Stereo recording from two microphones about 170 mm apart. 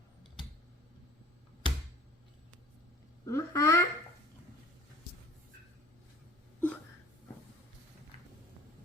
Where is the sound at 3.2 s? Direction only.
15° left (ahead or behind).